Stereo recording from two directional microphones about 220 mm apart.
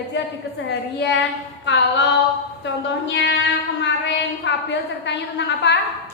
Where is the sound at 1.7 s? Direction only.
50° left (ahead or behind).